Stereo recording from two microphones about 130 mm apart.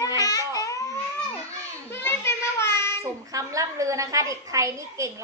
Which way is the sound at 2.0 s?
20° left (ahead or behind).